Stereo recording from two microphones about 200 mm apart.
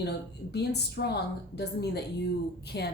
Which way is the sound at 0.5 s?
55° left (ahead or behind).